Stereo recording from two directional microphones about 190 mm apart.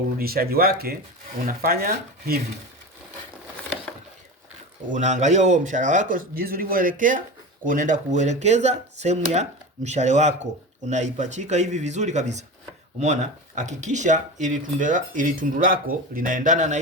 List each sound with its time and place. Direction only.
0.2 s speech: 50° right (ahead or behind)
4.9 s speech: 40° right (ahead or behind)
13.6 s speech: 40° right (ahead or behind)